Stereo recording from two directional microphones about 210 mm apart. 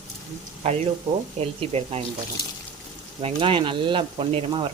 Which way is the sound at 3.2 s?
25° right (ahead or behind).